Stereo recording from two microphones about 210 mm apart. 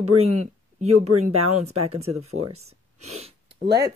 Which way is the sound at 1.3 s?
90° right.